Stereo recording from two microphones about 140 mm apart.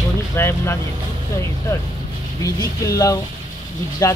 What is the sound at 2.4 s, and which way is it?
Speech, 25° left (ahead or behind).